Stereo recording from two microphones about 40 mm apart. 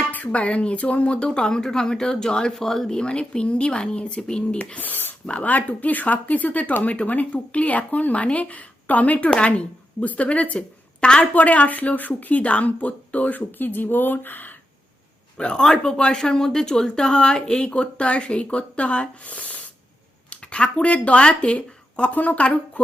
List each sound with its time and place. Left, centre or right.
0.3 s speech: left; by 2.9 s centre
2.9 s speech: left
4.8 s a sound: left
5.4 s speech: left
15.5 s speech: centre
17.7 s speech: left
22.1 s speech: left